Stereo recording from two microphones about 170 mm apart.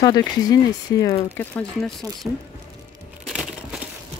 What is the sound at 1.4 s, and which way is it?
Speech, 10° left (ahead or behind).